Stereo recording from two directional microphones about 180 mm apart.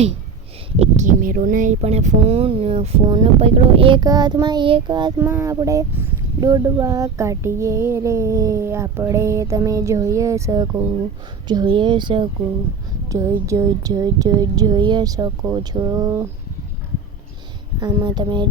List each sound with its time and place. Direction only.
0.8 s speech: 45° right (ahead or behind); by 5.1 s 25° right (ahead or behind)
5.2 s speech: 15° right (ahead or behind)
17.7 s speech: 25° right (ahead or behind)